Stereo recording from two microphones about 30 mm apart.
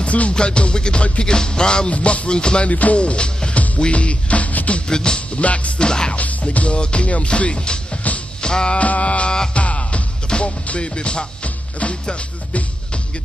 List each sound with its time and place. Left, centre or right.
0.0 s music: left
0.3 s music: left
1.9 s music: left
2.7 s music: left
3.0 s music: left
3.5 s music: left
3.9 s music: left
4.8 s music: left
5.4 s music: left
5.8 s music: left
6.1 s music: left
8.7 s music: left